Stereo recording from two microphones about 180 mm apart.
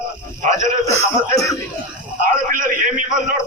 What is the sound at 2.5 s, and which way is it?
Speech, 50° right (ahead or behind).